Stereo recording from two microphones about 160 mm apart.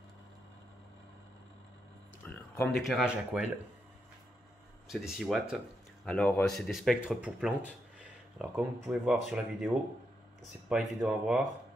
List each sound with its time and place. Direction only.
2.2 s a sound: 10° left (ahead or behind)
2.7 s speech: centre (ahead or behind)
4.8 s speech: centre (ahead or behind)
10.7 s speech: 5° right (ahead or behind)